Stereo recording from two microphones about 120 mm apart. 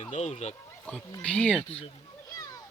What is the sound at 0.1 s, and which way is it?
Speech, 80° left.